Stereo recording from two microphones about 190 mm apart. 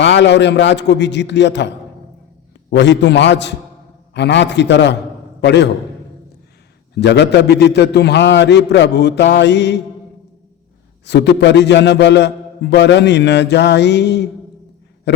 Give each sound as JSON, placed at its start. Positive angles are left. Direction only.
{"t": 0.0, "sound": "a man's voice", "side_deg": 70}
{"t": 7.0, "sound": "a man's voice", "side_deg": 65}
{"t": 11.0, "sound": "a man's voice", "side_deg": 65}